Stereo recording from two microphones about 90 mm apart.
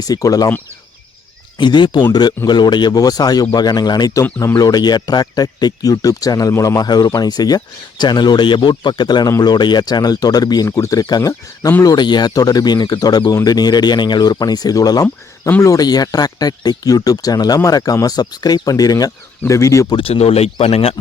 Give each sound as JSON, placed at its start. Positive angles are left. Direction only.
{"t": 0.0, "sound": "speech", "side_deg": 40}
{"t": 1.5, "sound": "speech", "side_deg": 60}
{"t": 4.5, "sound": "speech", "side_deg": 50}
{"t": 11.8, "sound": "speech", "side_deg": 50}
{"t": 15.0, "sound": "speech", "side_deg": 20}
{"t": 15.6, "sound": "speech", "side_deg": 45}
{"t": 20.0, "sound": "speech", "side_deg": 90}